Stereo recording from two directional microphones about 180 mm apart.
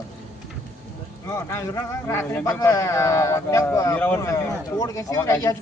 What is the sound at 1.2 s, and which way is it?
A man's voice, 15° left (ahead or behind).